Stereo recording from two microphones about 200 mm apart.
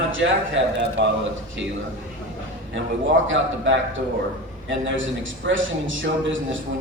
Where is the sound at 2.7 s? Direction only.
70° right (ahead or behind).